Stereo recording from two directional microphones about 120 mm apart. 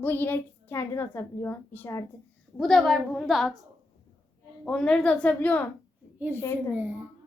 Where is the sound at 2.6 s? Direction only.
Centre (ahead or behind).